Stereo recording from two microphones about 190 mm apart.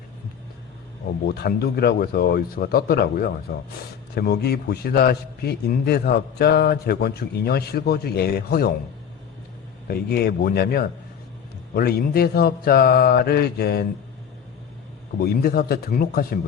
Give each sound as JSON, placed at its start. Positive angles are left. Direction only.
{"t": 1.3, "sound": "a man's voice", "side_deg": 60}
{"t": 9.8, "sound": "a man's voice", "side_deg": 55}
{"t": 15.2, "sound": "speech", "side_deg": 55}